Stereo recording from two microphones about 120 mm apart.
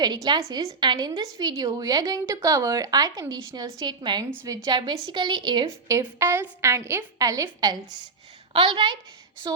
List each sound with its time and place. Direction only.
0.0 s a woman's voice: 35° right (ahead or behind)
6.1 s a woman's voice: 20° right (ahead or behind)
8.5 s a woman's voice: 45° right (ahead or behind)